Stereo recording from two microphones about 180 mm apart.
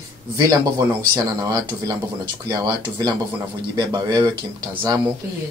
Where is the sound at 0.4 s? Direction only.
25° right (ahead or behind).